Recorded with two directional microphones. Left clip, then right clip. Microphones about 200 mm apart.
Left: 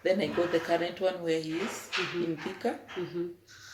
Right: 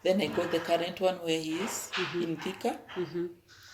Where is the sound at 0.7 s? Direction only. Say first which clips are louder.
Right 1 dB; 40° right (ahead or behind).